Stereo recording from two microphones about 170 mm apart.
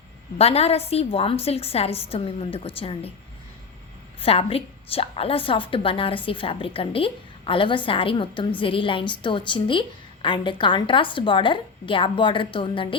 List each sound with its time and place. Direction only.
0.3 s a woman's voice: 35° left (ahead or behind)
4.2 s a woman's voice: 35° left (ahead or behind)